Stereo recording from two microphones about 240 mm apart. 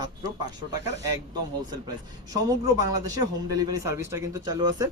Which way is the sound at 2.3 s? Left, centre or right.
Centre.